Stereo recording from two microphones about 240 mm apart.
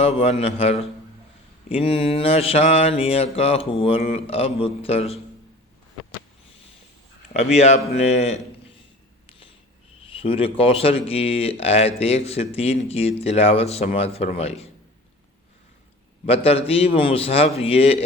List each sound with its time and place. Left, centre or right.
0.0 s mantra: left
7.3 s mantra: left
10.1 s a sound: left
10.6 s mantra: left
16.2 s mantra: left